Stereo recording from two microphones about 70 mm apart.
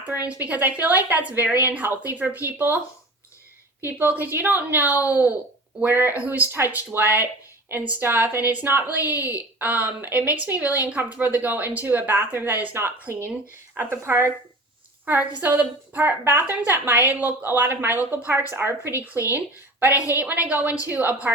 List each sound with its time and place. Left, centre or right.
0.1 s a woman's voice: right
3.8 s a woman's voice: right
13.1 s speech: left
13.7 s a woman's voice: right
15.0 s a woman's voice: right
19.9 s a woman's voice: left
20.1 s a woman's voice: right